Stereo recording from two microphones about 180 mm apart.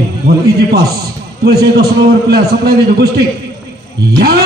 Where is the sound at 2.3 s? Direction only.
60° right (ahead or behind).